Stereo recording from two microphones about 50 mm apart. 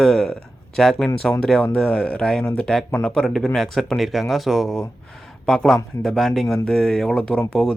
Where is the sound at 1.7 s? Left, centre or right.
Left.